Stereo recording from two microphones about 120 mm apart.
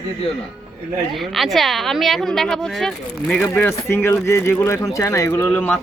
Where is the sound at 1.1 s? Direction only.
Centre (ahead or behind).